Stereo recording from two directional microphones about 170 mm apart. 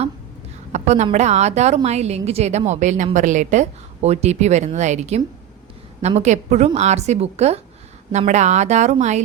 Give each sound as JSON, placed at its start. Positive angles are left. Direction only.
{"t": 0.7, "sound": "a woman's voice", "side_deg": -40}